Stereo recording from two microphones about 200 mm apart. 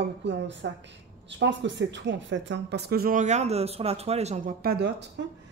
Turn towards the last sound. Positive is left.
turn(degrees=-55)  # may be behind; listen again after turning